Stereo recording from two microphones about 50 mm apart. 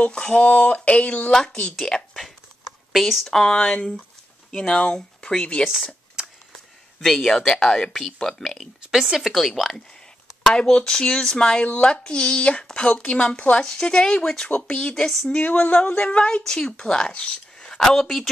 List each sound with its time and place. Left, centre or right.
0.0 s a woman's voice: left
1.3 s speech: centre
3.0 s speech: centre
7.0 s speech: centre
8.9 s a woman's voice: centre
9.3 s a woman's voice: centre
10.4 s speech: centre
11.6 s a woman's voice: left
11.9 s a woman's voice: centre
18.0 s a woman's voice: centre